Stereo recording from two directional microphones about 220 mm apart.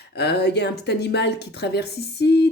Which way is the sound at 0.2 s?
50° left (ahead or behind).